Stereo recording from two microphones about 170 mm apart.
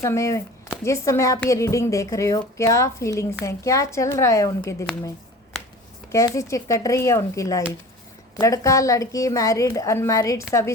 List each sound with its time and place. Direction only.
0.0 s a woman's voice: 15° left (ahead or behind)
6.1 s a woman's voice: 20° left (ahead or behind)